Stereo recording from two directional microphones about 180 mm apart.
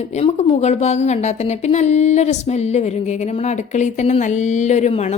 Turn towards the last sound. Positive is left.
turn(degrees=35)  # may be behind; listen again after turning